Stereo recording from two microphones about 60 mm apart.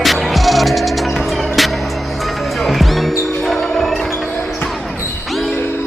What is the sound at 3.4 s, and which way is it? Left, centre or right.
Basketball bounce, centre.